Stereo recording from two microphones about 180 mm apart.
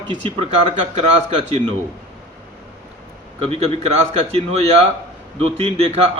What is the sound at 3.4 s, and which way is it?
A man's voice, 30° right (ahead or behind).